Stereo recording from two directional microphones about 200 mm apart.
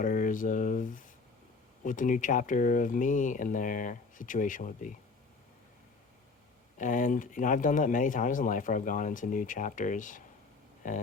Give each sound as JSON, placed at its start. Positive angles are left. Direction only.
{"t": 0.0, "sound": "speech", "side_deg": 40}
{"t": 6.7, "sound": "speech", "side_deg": 40}